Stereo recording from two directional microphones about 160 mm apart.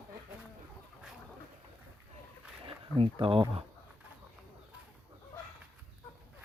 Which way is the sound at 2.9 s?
35° right (ahead or behind).